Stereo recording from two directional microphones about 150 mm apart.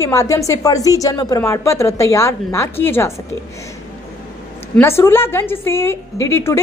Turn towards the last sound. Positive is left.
turn(degrees=15)  # may be behind; listen again after turning